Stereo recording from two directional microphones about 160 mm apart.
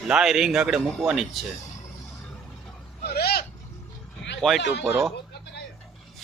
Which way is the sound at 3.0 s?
85° left.